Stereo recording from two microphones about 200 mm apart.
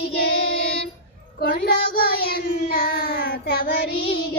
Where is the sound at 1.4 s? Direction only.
50° left (ahead or behind).